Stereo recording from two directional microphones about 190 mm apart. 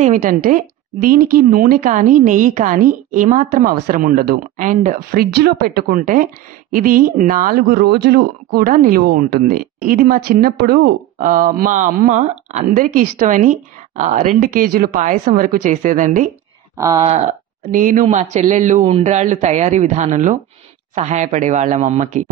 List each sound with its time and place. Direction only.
0.0 s speech: 45° right (ahead or behind)
16.7 s speech: 15° right (ahead or behind)
17.0 s a man's voice: 35° right (ahead or behind)